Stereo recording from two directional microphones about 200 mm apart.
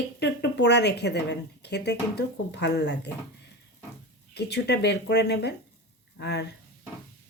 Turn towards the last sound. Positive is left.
turn(degrees=55)  # may be behind; listen again after turning